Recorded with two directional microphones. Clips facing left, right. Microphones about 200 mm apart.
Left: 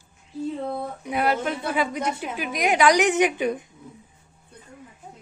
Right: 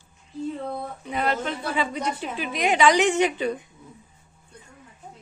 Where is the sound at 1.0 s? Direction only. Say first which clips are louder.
Left 2 dB; 10° left (ahead or behind).